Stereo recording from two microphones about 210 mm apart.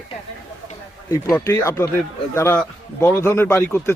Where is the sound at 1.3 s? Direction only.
10° left (ahead or behind).